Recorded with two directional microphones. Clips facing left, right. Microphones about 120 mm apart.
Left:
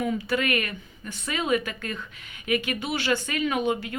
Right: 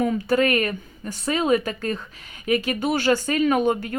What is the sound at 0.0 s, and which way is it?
Speech, 40° right (ahead or behind).